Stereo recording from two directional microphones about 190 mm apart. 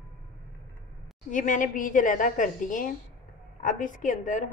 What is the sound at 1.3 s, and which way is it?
A woman's voice, 40° left (ahead or behind).